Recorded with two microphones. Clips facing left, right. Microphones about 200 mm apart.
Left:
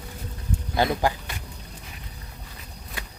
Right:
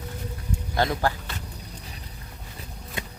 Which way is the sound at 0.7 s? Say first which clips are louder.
Left 2 dB; 15° left (ahead or behind).